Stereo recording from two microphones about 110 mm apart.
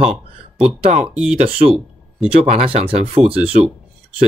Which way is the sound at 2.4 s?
65° right (ahead or behind).